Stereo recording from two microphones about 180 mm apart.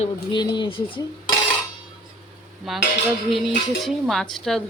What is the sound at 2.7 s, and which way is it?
Speech, centre (ahead or behind).